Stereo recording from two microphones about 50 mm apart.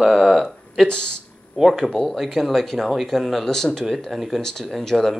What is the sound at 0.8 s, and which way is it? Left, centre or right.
Speech, centre.